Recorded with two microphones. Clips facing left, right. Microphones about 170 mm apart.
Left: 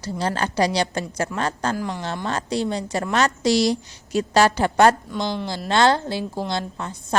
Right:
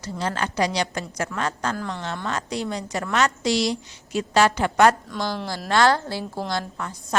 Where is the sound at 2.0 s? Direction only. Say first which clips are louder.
Left 2 dB; 35° left (ahead or behind).